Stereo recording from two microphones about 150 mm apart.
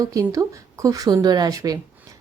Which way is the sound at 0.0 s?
20° right (ahead or behind).